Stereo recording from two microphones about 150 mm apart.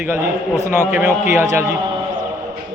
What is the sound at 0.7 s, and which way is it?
Speech, 10° right (ahead or behind).